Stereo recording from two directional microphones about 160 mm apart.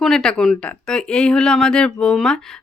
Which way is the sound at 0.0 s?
5° left (ahead or behind).